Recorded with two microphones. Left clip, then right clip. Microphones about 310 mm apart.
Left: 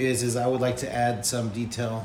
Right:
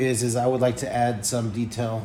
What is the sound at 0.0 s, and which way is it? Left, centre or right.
Speech, centre.